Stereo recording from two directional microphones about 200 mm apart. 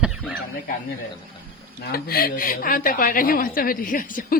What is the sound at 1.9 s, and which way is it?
A woman's voice, 50° left (ahead or behind).